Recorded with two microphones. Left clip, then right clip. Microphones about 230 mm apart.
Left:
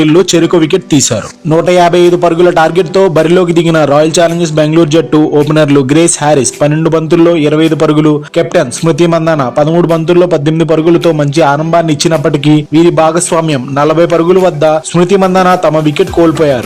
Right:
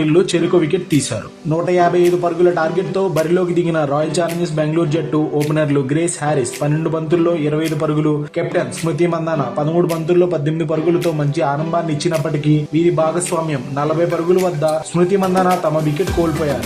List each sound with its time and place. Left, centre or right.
0.0 s speech: left